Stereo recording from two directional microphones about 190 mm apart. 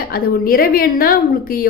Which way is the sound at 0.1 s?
50° left (ahead or behind).